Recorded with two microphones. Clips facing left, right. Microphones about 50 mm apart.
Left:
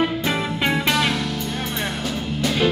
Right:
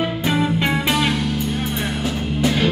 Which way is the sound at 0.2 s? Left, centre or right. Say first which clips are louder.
Right 3 dB; centre.